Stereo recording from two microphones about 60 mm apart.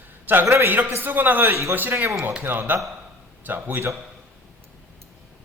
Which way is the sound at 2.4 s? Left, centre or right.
Right.